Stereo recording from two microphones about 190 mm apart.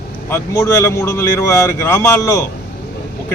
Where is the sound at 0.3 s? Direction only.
15° left (ahead or behind).